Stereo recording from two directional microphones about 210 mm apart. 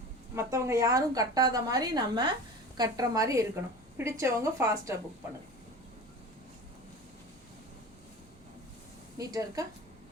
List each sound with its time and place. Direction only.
0.3 s a woman's voice: 15° right (ahead or behind)
9.1 s a woman's voice: 15° right (ahead or behind)